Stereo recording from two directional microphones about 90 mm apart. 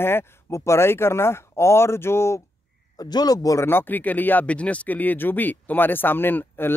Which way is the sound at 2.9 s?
50° left (ahead or behind).